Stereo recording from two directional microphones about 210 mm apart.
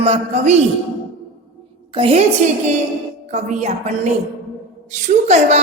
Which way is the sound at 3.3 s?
35° right (ahead or behind).